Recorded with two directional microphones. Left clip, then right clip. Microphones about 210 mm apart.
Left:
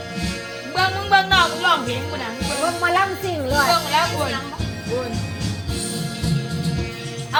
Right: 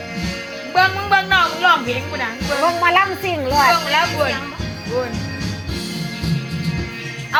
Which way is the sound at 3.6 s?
15° right (ahead or behind).